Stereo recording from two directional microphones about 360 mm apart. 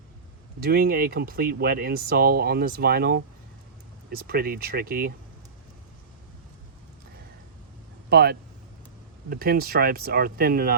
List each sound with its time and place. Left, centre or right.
0.6 s speech: right
8.1 s speech: right